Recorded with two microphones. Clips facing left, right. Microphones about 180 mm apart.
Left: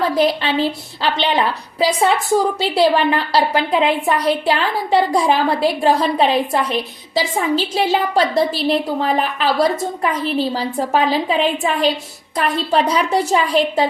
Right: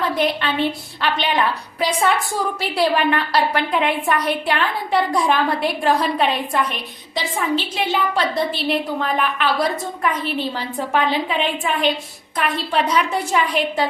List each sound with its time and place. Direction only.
0.2 s a woman's voice: 35° left (ahead or behind)